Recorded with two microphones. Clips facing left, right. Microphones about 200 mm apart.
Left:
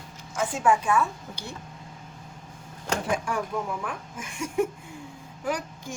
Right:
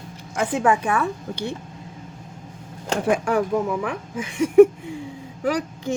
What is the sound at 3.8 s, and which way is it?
Speech, 80° right.